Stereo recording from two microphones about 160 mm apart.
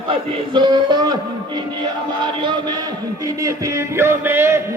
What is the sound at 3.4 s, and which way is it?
Music, 15° right (ahead or behind).